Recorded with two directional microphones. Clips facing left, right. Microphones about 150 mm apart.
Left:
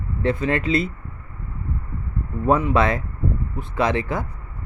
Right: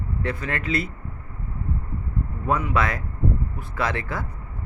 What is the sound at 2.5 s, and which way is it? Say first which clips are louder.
Speech: left 5 dB; 25° left (ahead or behind).